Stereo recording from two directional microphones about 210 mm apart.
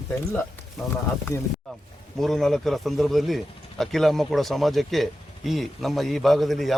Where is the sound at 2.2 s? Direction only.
Centre (ahead or behind).